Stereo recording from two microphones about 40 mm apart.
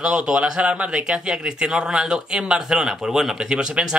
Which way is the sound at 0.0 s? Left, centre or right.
Right.